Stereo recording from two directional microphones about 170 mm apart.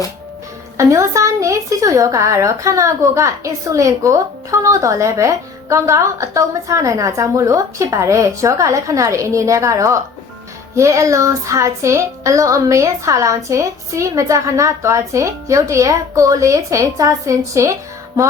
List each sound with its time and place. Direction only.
0.8 s a woman's voice: 15° right (ahead or behind)